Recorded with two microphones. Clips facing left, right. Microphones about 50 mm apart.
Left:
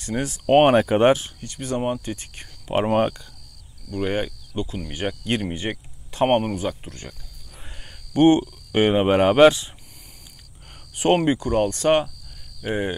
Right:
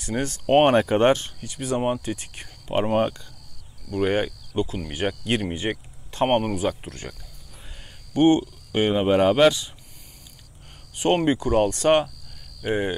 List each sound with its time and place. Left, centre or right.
0.0 s speech: centre
1.4 s speech: centre
2.7 s speech: centre
3.9 s speech: centre
6.6 s speech: centre
8.1 s speech: centre
11.0 s speech: centre
11.2 s speech: centre